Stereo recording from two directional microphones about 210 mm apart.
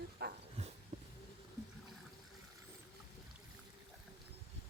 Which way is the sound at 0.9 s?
30° right (ahead or behind).